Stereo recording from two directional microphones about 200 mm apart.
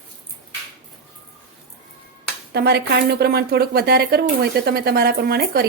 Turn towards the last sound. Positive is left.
turn(degrees=-50)  # may be behind; listen again after turning